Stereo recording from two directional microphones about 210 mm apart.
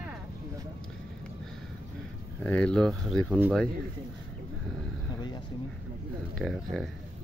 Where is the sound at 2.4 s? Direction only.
5° left (ahead or behind).